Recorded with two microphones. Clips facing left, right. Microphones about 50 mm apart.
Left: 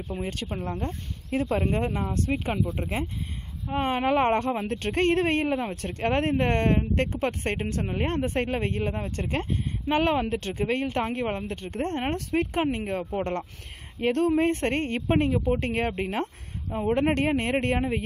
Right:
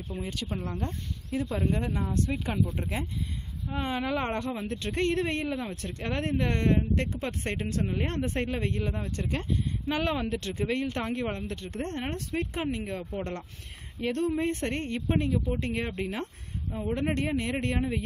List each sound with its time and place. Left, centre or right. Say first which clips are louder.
0.2 s speech: left 1 dB; left
2.6 s speech: left 1 dB; centre
3.6 s speech: left 6 dB; left
16.7 s speech: left 6 dB; left